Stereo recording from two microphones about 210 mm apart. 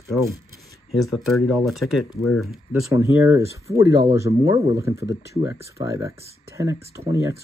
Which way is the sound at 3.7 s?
15° right (ahead or behind).